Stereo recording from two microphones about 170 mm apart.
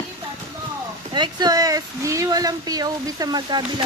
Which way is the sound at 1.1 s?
25° right (ahead or behind).